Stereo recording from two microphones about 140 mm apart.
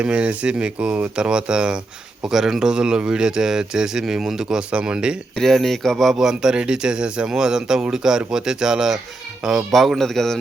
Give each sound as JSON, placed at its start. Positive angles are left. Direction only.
{"t": 0.0, "sound": "speech", "side_deg": -10}